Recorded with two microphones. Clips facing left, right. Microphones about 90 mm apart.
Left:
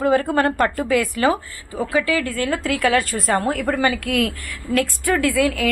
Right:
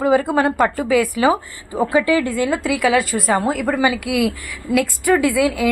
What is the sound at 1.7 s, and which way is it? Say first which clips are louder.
Speech: right 4 dB; 35° right (ahead or behind).